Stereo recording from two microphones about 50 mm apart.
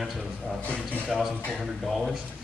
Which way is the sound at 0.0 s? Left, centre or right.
Centre.